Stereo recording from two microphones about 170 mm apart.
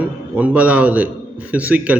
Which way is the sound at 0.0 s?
10° right (ahead or behind).